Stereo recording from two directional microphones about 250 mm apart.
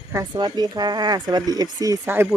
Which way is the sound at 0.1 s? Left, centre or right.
Centre.